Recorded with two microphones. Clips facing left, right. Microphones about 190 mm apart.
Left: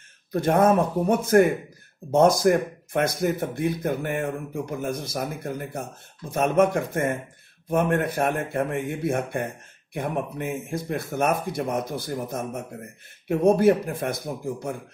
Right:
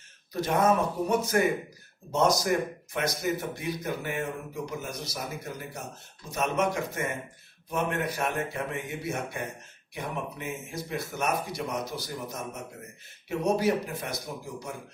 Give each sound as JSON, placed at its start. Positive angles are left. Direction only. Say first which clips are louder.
{"t": 0.3, "sound": "speech", "louder": "left 5 dB", "side_deg": 55}